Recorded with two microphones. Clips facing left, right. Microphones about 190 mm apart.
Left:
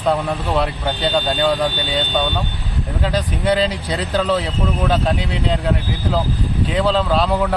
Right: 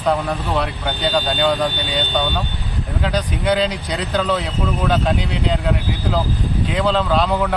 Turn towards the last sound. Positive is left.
turn(degrees=0)  # may be behind; listen again after turning